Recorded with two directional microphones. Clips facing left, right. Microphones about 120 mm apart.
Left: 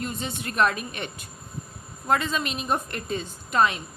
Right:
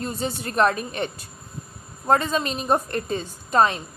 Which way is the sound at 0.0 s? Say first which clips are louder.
Right 4 dB; 35° right (ahead or behind).